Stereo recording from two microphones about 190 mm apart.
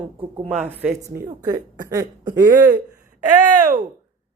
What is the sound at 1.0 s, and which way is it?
Speech, 20° right (ahead or behind).